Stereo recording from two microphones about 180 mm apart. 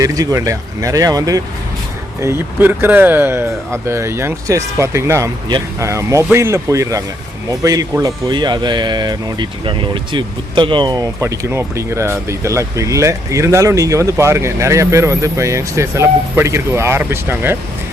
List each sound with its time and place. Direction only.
0.0 s speech: 20° right (ahead or behind)